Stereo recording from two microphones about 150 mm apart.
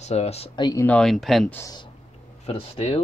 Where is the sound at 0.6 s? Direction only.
20° left (ahead or behind).